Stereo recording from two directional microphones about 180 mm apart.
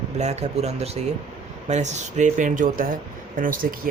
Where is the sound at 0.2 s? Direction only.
40° right (ahead or behind).